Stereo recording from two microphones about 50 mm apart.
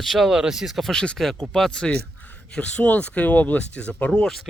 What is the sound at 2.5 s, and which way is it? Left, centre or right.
Speech, left.